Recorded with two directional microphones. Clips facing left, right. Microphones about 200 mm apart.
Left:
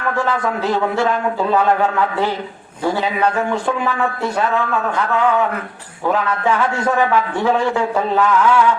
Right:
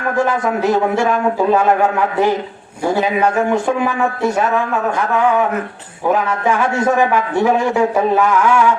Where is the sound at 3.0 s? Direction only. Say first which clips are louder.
Right 5 dB; 15° right (ahead or behind).